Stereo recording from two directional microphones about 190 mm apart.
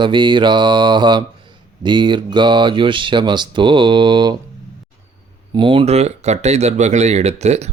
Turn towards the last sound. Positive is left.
turn(degrees=-35)  # may be behind; listen again after turning